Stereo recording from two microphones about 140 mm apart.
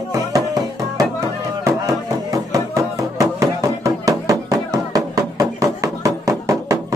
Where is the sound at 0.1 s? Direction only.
25° right (ahead or behind).